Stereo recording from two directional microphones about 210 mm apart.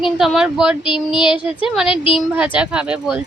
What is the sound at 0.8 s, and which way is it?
Child singing, 25° left (ahead or behind).